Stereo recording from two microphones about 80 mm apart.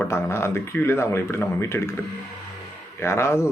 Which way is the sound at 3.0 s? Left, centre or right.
Left.